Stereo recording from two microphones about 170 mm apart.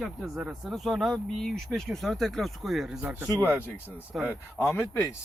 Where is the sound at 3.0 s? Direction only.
10° right (ahead or behind).